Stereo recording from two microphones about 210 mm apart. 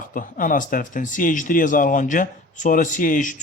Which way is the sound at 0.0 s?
40° left (ahead or behind).